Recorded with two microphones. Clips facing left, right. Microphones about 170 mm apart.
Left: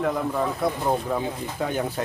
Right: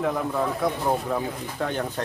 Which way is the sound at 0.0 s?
Centre (ahead or behind).